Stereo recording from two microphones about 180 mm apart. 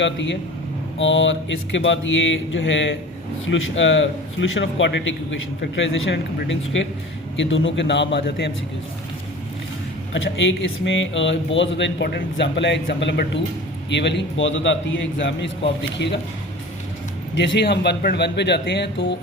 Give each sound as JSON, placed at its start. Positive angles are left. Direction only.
{"t": 0.0, "sound": "a man's voice", "side_deg": 90}
{"t": 10.2, "sound": "a man's voice", "side_deg": 90}
{"t": 17.3, "sound": "speech", "side_deg": 80}